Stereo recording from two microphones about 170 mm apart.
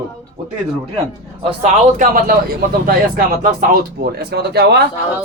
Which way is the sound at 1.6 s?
50° right (ahead or behind).